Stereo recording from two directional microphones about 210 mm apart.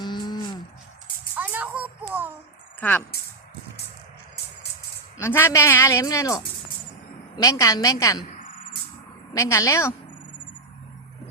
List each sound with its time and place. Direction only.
0.0 s music: 20° left (ahead or behind)
1.4 s a sound: 5° right (ahead or behind)
2.8 s a woman's voice: 5° left (ahead or behind)
5.2 s a woman's voice: 10° left (ahead or behind)
7.4 s a woman's voice: 15° left (ahead or behind)
8.4 s cricket: 40° left (ahead or behind)
9.3 s a woman's voice: 15° left (ahead or behind)